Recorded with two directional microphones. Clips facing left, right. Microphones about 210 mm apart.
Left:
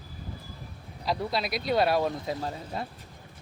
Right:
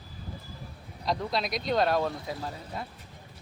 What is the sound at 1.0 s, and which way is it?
Speech, 5° left (ahead or behind).